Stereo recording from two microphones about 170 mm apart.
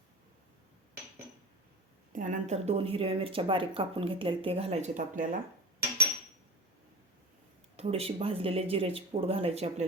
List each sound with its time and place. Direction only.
2.1 s a woman's voice: 50° right (ahead or behind)
7.8 s a woman's voice: 35° right (ahead or behind)